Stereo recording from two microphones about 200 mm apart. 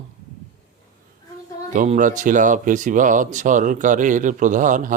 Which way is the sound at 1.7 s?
40° right (ahead or behind).